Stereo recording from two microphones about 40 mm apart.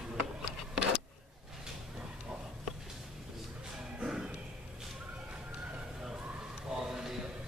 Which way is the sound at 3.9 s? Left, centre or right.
Centre.